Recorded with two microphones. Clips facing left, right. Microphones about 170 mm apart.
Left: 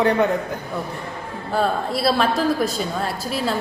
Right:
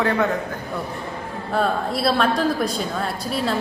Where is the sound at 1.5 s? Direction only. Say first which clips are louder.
Left 1 dB; centre (ahead or behind).